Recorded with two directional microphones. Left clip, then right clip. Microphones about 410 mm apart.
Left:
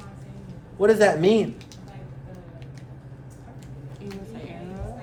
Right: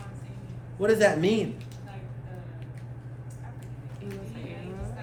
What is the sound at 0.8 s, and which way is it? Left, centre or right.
Speech, centre.